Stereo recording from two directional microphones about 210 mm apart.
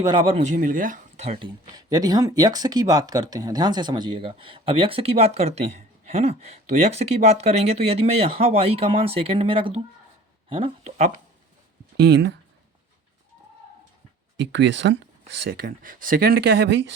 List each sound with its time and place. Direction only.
0.0 s speech: 20° right (ahead or behind)
1.7 s speech: 20° right (ahead or behind); by 11.2 s 35° right (ahead or behind)
11.9 s speech: 55° right (ahead or behind)
14.3 s speech: 60° right (ahead or behind)
15.4 s speech: 45° right (ahead or behind)